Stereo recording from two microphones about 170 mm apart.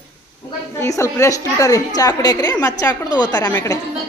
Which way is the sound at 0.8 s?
15° left (ahead or behind).